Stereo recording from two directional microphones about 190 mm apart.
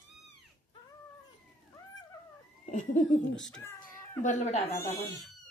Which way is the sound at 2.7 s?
40° left (ahead or behind).